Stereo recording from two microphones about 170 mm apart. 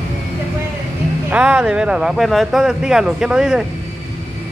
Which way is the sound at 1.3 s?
10° right (ahead or behind).